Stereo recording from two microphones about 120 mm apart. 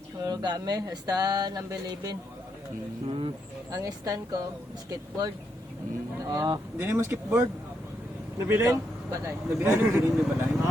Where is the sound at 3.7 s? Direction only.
30° right (ahead or behind).